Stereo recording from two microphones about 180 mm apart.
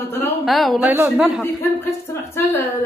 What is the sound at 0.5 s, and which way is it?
Speech, centre (ahead or behind).